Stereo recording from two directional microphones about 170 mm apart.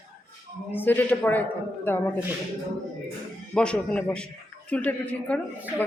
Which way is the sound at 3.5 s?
5° left (ahead or behind).